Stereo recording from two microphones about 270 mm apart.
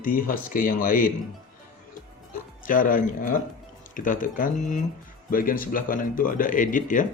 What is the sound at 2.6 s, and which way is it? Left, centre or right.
Speech, left.